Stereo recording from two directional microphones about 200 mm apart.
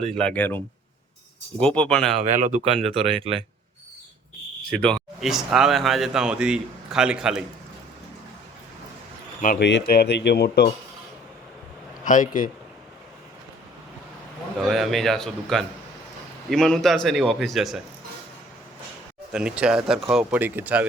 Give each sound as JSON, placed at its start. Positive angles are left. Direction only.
{"t": 0.2, "sound": "speech", "side_deg": 5}
{"t": 2.4, "sound": "speech", "side_deg": -35}
{"t": 4.7, "sound": "speech", "side_deg": 5}
{"t": 9.4, "sound": "speech", "side_deg": 45}
{"t": 9.6, "sound": "speech", "side_deg": 55}
{"t": 12.0, "sound": "speech", "side_deg": 40}
{"t": 14.6, "sound": "speech", "side_deg": 0}
{"t": 19.3, "sound": "speech", "side_deg": -5}